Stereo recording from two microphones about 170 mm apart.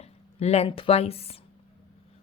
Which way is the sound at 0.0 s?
40° left (ahead or behind).